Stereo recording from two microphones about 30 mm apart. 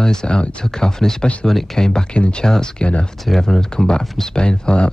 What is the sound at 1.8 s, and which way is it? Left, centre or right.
Speech, left.